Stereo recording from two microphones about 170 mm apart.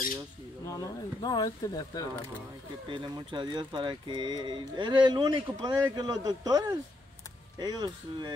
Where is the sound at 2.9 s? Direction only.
30° right (ahead or behind).